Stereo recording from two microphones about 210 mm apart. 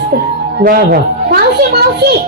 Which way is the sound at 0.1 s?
45° right (ahead or behind).